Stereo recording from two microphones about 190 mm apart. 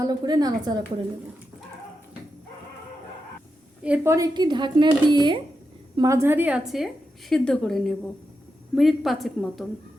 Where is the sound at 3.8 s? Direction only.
5° right (ahead or behind).